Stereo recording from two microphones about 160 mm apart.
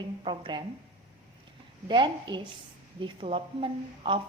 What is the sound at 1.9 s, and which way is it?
A woman's voice, 30° right (ahead or behind).